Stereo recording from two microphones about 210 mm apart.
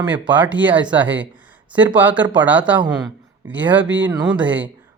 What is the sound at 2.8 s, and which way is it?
Speech, 20° right (ahead or behind).